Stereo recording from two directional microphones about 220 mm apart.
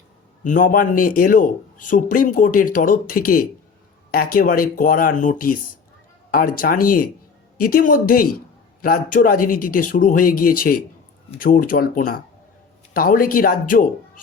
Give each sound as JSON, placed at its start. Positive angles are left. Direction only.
{"t": 0.4, "sound": "speech", "side_deg": 35}